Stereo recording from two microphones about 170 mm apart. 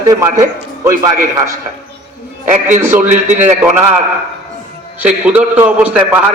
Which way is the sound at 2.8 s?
15° right (ahead or behind).